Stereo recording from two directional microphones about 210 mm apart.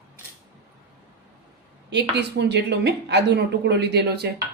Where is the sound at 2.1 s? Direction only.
55° right (ahead or behind).